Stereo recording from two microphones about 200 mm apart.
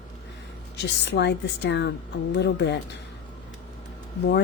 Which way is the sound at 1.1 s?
60° left (ahead or behind).